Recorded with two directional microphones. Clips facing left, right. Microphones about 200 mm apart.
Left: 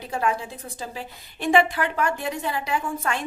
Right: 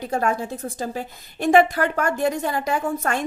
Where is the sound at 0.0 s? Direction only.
45° right (ahead or behind).